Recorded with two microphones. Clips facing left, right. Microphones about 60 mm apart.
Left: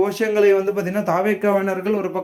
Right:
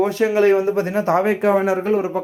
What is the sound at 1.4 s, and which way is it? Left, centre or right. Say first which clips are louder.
Speech: right 2 dB; right.